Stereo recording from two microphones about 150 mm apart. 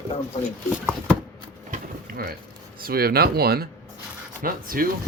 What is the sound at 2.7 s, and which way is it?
Speech, 85° right.